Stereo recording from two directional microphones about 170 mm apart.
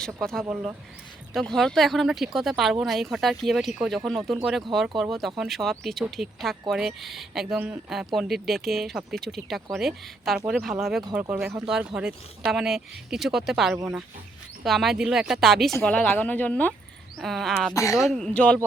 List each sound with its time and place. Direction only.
0.0 s speech: 5° left (ahead or behind)
17.7 s speech: 20° left (ahead or behind)
18.0 s speech: 5° left (ahead or behind)